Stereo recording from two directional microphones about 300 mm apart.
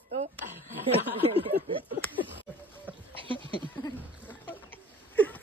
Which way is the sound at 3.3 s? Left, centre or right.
Centre.